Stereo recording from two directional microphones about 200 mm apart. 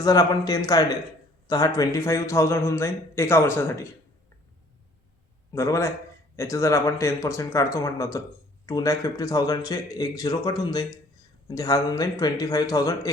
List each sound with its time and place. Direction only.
0.0 s a man's voice: 15° left (ahead or behind)
5.5 s a man's voice: 15° left (ahead or behind)